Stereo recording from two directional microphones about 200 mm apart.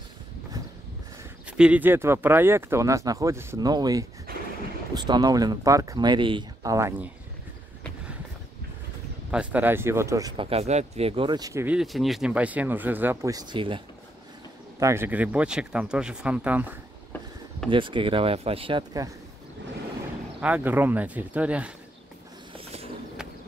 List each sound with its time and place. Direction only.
1.6 s speech: 5° right (ahead or behind)
9.3 s speech: 5° right (ahead or behind); by 13.8 s 25° right (ahead or behind)
14.8 s speech: 15° right (ahead or behind)
17.6 s speech: 25° right (ahead or behind)
20.3 s speech: 5° right (ahead or behind)